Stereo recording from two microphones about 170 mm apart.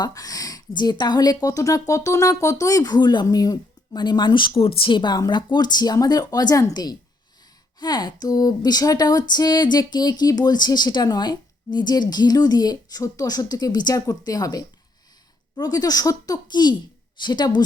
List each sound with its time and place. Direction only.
0.0 s speech: 20° left (ahead or behind)